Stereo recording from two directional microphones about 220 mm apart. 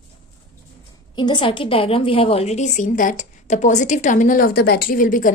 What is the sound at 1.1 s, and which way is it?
A woman's voice, 20° left (ahead or behind).